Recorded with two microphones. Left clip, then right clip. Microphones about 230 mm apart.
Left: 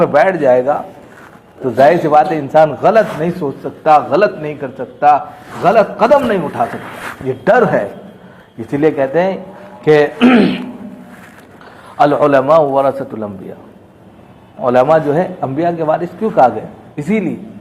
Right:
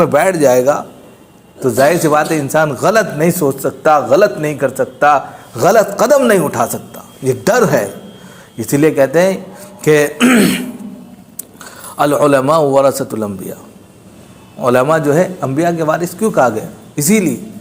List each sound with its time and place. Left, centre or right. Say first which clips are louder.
0.0 s a man's voice: even; right
11.9 s a man's voice: left 1 dB; right
14.6 s a man's voice: left 1 dB; right